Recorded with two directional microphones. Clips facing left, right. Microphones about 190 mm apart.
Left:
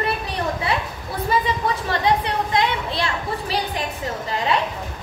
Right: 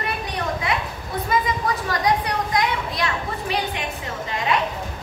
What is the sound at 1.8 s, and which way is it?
A child's voice, 25° left (ahead or behind).